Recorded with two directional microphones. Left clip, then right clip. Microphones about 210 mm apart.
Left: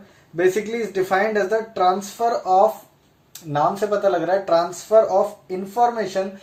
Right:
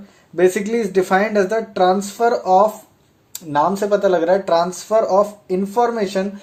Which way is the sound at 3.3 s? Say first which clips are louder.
Right 3 dB; 50° right (ahead or behind).